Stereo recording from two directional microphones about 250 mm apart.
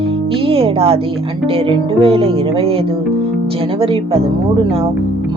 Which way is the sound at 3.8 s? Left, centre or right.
Right.